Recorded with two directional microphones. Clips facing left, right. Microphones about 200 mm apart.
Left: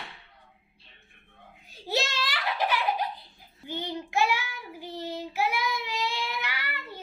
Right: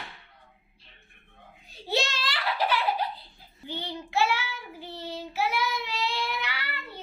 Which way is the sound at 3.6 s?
10° left (ahead or behind).